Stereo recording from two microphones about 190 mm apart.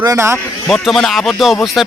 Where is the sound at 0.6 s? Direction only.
Centre (ahead or behind).